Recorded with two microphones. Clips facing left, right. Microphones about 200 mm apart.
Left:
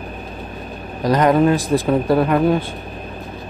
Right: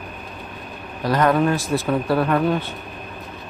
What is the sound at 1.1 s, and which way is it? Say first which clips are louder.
Speech: left 4 dB; 20° left (ahead or behind).